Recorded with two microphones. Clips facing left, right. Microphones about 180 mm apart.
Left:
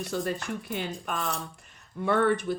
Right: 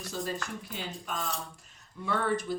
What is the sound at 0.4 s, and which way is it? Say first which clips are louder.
Speech: left 6 dB; 60° left (ahead or behind).